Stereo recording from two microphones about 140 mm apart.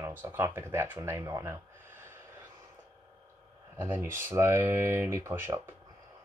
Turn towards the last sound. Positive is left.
turn(degrees=-15)  # may be behind; listen again after turning